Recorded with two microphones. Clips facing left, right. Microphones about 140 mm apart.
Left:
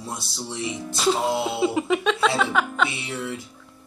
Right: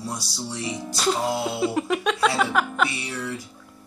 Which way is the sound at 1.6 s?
Centre (ahead or behind).